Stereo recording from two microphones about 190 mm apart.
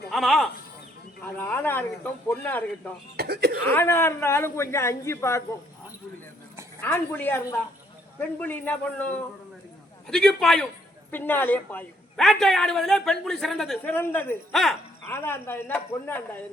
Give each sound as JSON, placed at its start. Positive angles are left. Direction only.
{"t": 0.1, "sound": "speech", "side_deg": 0}
{"t": 3.2, "sound": "speech", "side_deg": -55}
{"t": 3.7, "sound": "speech", "side_deg": 10}
{"t": 6.8, "sound": "a man's voice", "side_deg": 10}
{"t": 15.0, "sound": "speech", "side_deg": 10}